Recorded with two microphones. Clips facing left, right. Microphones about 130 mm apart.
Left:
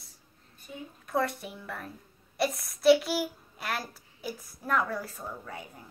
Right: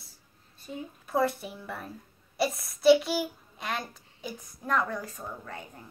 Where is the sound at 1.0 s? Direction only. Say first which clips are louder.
Right 2 dB; centre (ahead or behind).